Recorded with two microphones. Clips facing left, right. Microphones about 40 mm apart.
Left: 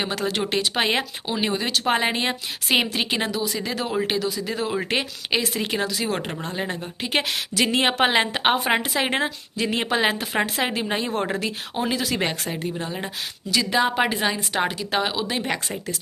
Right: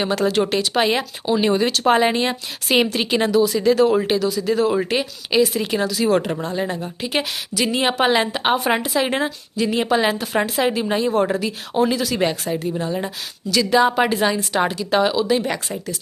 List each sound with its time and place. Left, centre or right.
0.0 s speech: centre
1.5 s speech: centre
4.9 s speech: left; by 6.3 s centre
6.5 s a woman's voice: left
7.0 s a woman's voice: left
12.8 s speech: centre
14.9 s speech: centre
15.4 s a woman's voice: left